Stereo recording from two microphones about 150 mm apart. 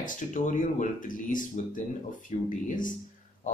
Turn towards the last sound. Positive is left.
turn(degrees=60)  # may be behind; listen again after turning